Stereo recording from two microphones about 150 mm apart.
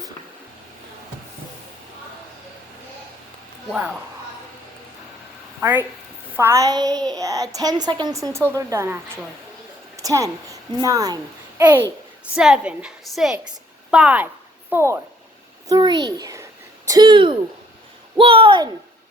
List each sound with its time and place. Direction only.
3.7 s speech: 10° right (ahead or behind)
5.5 s a woman's voice: 15° right (ahead or behind)
15.7 s a child's voice: 30° right (ahead or behind)